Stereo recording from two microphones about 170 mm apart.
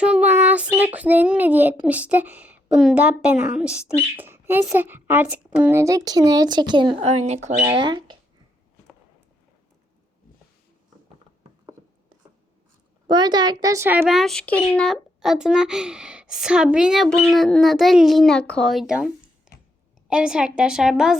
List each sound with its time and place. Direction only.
0.0 s a sound: 10° right (ahead or behind)
0.9 s speech: 10° right (ahead or behind); by 7.1 s 25° right (ahead or behind)
7.1 s speech: 40° right (ahead or behind)
7.6 s a woman's voice: 25° right (ahead or behind)
13.1 s a woman's voice: 25° right (ahead or behind)
14.1 s a child's voice: centre (ahead or behind)
19.5 s a sound: 5° right (ahead or behind)
20.1 s a child's voice: 5° right (ahead or behind)